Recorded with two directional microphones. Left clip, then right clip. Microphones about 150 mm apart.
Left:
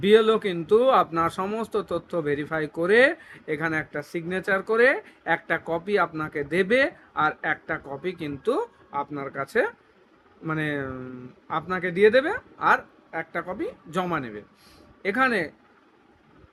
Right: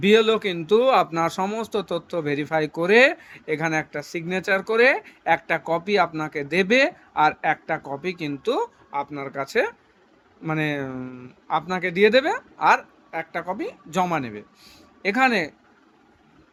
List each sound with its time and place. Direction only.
0.0 s a man's voice: 35° right (ahead or behind)